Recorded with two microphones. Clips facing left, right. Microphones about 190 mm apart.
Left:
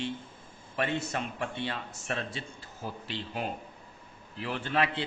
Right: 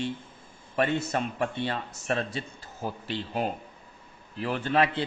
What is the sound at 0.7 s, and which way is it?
A man's voice, 45° right (ahead or behind).